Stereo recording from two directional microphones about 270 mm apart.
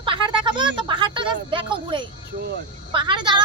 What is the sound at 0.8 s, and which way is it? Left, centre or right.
A woman's voice, centre.